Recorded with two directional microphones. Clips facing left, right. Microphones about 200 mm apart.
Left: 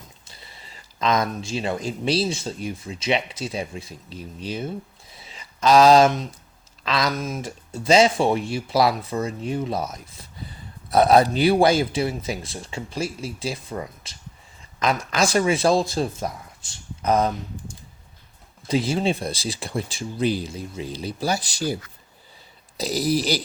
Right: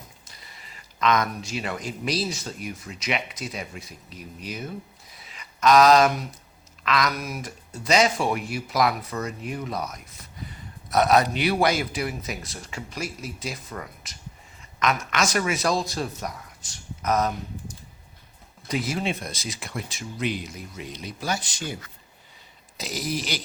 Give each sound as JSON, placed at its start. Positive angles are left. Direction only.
{"t": 0.3, "sound": "speech", "side_deg": 30}
{"t": 5.1, "sound": "a sound", "side_deg": 30}
{"t": 6.8, "sound": "speech", "side_deg": 30}
{"t": 18.7, "sound": "speech", "side_deg": 30}
{"t": 22.8, "sound": "speech", "side_deg": 35}